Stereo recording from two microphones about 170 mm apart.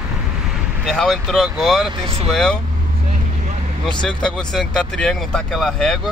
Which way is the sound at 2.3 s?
Centre (ahead or behind).